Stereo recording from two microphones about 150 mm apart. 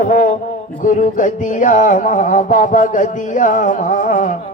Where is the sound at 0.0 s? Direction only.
65° left (ahead or behind).